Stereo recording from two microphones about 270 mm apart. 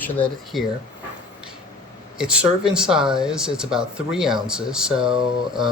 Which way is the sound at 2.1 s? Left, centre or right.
Centre.